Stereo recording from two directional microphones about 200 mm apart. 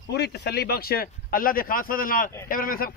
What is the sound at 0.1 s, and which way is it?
Speech, 55° left (ahead or behind).